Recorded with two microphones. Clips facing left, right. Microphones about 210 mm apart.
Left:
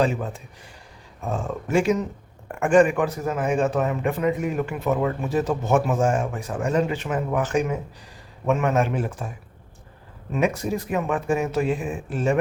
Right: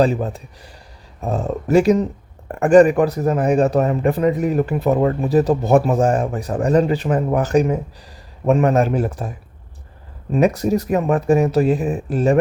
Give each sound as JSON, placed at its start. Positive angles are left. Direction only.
{"t": 0.0, "sound": "speech", "side_deg": -35}
{"t": 10.3, "sound": "speech", "side_deg": -40}